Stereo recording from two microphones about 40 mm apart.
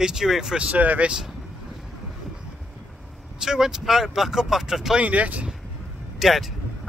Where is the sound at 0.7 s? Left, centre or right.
Right.